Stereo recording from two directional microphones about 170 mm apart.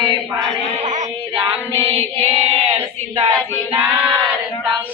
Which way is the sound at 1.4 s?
30° right (ahead or behind).